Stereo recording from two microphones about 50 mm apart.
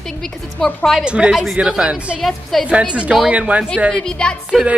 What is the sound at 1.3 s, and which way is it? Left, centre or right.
Speech, centre.